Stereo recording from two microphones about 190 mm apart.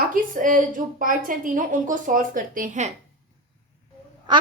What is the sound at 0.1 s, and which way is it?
A woman's voice, 45° right (ahead or behind).